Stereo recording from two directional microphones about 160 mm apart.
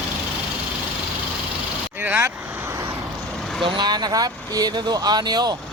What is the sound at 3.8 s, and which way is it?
Speech, 25° right (ahead or behind).